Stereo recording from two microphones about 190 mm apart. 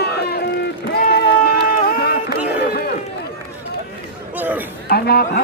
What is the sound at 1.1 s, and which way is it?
Run, 55° left (ahead or behind).